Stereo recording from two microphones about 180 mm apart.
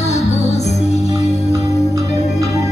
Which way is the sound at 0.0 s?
40° left (ahead or behind).